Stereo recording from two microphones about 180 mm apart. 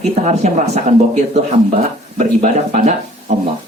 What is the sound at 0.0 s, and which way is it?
Speech, 40° right (ahead or behind).